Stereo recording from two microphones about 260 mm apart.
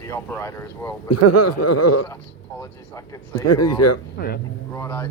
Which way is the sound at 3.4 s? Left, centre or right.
Left.